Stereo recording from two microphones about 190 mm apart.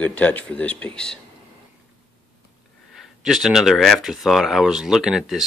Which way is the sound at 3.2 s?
Centre (ahead or behind).